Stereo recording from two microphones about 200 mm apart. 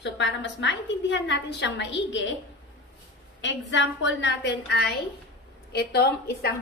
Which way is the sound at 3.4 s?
65° left (ahead or behind).